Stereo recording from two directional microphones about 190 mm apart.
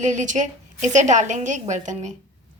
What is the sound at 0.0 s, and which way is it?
A woman's voice, 40° right (ahead or behind).